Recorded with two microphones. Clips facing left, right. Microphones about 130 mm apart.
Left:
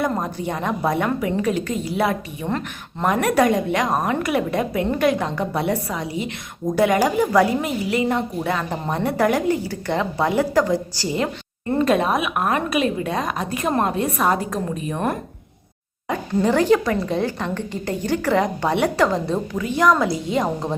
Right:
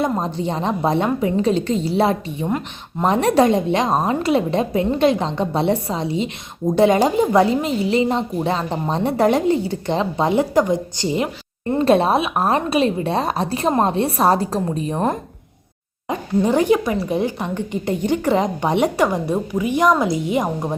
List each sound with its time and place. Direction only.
0.0 s a woman's voice: 25° right (ahead or behind)
16.0 s speech: 20° right (ahead or behind)